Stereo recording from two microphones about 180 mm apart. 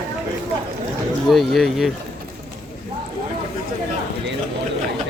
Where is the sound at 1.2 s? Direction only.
Centre (ahead or behind).